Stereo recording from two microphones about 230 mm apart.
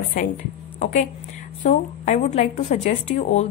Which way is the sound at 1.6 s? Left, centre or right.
Left.